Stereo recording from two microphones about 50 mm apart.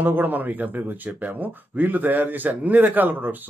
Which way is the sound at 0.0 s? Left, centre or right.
Right.